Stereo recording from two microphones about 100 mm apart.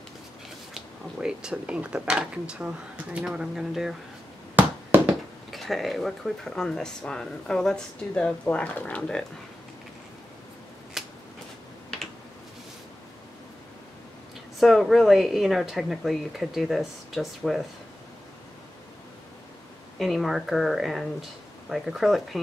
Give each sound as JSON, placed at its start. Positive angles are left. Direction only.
{"t": 0.7, "sound": "speech", "side_deg": -5}
{"t": 4.6, "sound": "a sound", "side_deg": -15}
{"t": 5.5, "sound": "speech", "side_deg": 0}
{"t": 11.0, "sound": "a sound", "side_deg": -5}
{"t": 14.6, "sound": "speech", "side_deg": 0}
{"t": 20.0, "sound": "speech", "side_deg": 0}